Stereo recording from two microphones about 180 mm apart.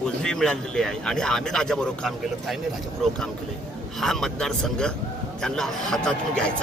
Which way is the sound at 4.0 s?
Centre (ahead or behind).